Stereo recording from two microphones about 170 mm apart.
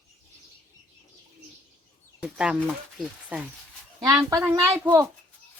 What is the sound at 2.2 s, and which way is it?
Speech, 5° right (ahead or behind).